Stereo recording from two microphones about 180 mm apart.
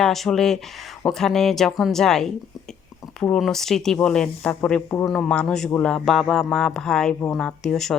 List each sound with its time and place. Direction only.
0.0 s a man's voice: centre (ahead or behind)